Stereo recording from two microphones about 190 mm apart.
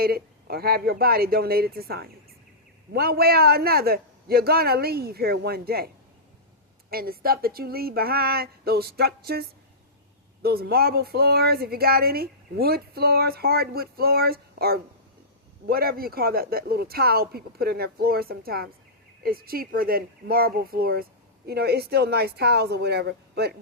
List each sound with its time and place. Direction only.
0.0 s speech: 55° right (ahead or behind)
6.9 s speech: 50° right (ahead or behind)